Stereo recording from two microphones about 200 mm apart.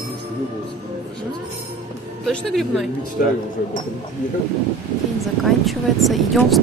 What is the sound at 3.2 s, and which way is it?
Speech, 45° left (ahead or behind).